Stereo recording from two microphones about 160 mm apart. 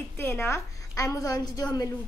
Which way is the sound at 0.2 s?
15° left (ahead or behind).